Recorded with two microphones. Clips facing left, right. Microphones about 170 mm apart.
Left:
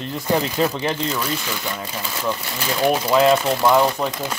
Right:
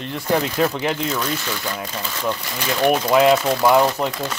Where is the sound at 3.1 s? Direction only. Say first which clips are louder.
Even; 10° right (ahead or behind).